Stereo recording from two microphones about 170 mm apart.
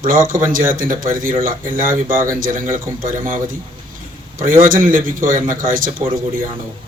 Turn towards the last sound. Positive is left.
turn(degrees=-55)  # may be behind; listen again after turning